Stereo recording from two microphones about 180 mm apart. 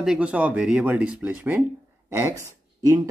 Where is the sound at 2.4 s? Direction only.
15° right (ahead or behind).